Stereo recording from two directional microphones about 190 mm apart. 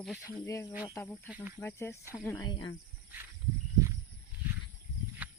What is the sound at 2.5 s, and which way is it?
Speech, 25° left (ahead or behind).